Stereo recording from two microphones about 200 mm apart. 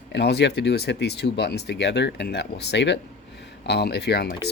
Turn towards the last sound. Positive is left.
turn(degrees=55)  # may be behind; listen again after turning